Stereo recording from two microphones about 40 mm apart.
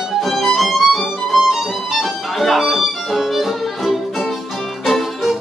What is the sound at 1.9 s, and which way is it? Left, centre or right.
Music, centre.